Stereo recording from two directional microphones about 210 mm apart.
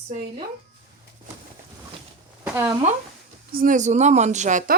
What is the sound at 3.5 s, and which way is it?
Speech, 40° right (ahead or behind).